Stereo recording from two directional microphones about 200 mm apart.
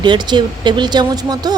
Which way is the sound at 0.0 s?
20° right (ahead or behind).